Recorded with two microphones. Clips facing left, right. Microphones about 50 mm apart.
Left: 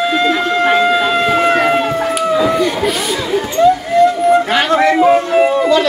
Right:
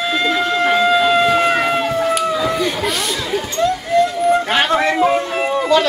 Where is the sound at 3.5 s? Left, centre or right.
Centre.